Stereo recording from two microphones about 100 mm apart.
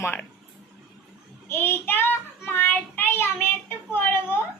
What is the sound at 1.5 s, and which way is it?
Child singing, 20° left (ahead or behind).